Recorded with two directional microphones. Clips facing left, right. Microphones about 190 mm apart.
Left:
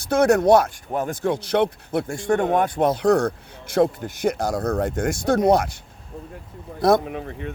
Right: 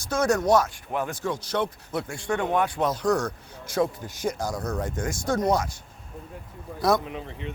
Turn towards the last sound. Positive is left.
turn(degrees=55)  # may be behind; listen again after turning